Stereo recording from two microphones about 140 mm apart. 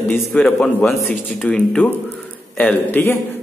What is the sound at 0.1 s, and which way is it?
Speech, 10° left (ahead or behind).